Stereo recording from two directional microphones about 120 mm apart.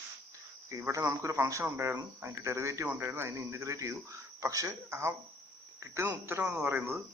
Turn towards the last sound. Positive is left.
turn(degrees=-20)  # may be behind; listen again after turning